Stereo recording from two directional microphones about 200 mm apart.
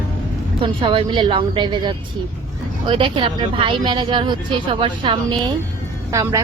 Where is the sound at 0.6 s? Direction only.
25° right (ahead or behind).